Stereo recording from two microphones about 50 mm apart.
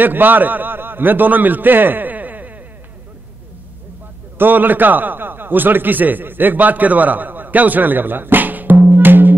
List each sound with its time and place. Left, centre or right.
0.0 s a man's voice: right
4.4 s a man's voice: right